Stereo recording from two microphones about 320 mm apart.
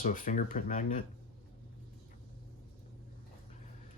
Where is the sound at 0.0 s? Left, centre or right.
Left.